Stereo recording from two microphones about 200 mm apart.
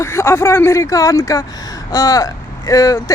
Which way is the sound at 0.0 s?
15° left (ahead or behind).